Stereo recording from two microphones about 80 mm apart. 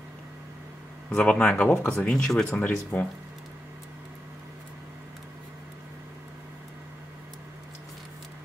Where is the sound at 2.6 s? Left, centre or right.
Left.